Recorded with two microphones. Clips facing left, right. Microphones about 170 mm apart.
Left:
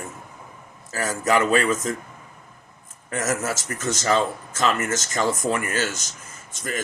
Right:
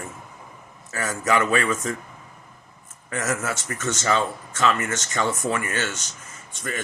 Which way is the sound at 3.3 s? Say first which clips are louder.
Left 1 dB; 35° left (ahead or behind).